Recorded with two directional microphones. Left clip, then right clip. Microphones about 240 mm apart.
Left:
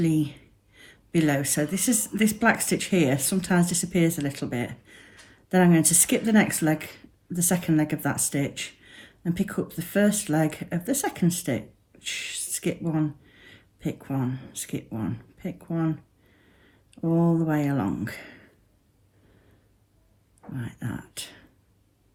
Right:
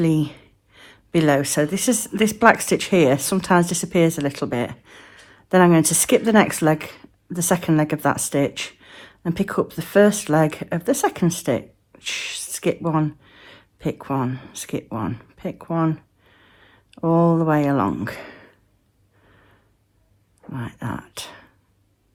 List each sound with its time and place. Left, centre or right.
0.0 s speech: right
20.5 s speech: right